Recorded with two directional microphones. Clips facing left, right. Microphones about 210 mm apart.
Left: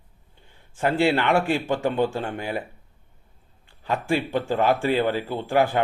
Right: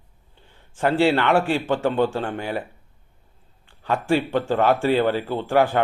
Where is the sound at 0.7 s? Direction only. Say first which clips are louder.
Right 2 dB; 35° right (ahead or behind).